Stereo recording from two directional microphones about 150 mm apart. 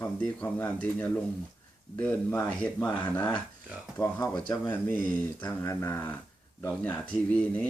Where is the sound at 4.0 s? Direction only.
20° left (ahead or behind).